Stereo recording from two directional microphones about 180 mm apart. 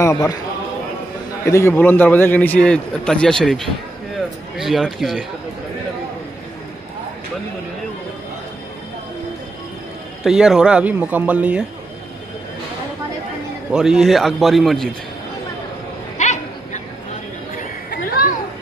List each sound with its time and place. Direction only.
0.0 s a man's voice: 15° left (ahead or behind)
1.4 s a man's voice: 15° left (ahead or behind)
10.2 s speech: 5° right (ahead or behind)
13.7 s a man's voice: 5° right (ahead or behind)
16.2 s a sound: 40° left (ahead or behind)